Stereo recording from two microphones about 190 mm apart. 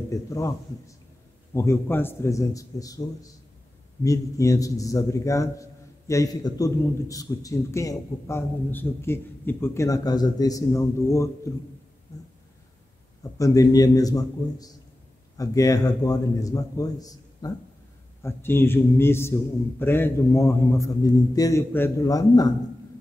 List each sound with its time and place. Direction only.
0.1 s a man's voice: 15° left (ahead or behind)
4.0 s a man's voice: 15° left (ahead or behind)
13.2 s a man's voice: 15° left (ahead or behind)